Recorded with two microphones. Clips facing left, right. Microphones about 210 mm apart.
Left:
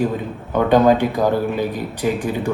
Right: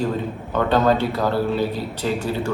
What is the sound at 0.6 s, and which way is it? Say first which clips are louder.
A man's voice: left 5 dB; 15° left (ahead or behind).